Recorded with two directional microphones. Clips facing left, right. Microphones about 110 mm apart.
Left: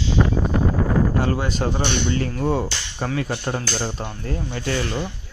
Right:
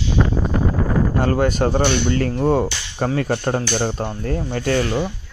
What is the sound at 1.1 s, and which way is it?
Speech, 50° right (ahead or behind).